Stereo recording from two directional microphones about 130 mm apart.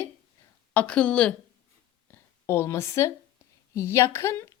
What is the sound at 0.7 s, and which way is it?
Speech, 10° left (ahead or behind).